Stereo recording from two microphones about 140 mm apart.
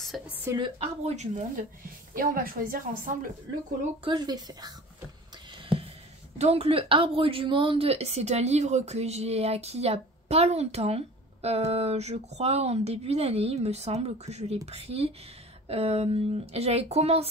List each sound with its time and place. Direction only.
0.1 s a woman's voice: centre (ahead or behind)
0.6 s a woman's voice: 35° right (ahead or behind)
1.0 s speech: 55° right (ahead or behind)
2.1 s a woman's voice: 90° right
4.0 s speech: 35° right (ahead or behind)
6.3 s a woman's voice: 45° right (ahead or behind)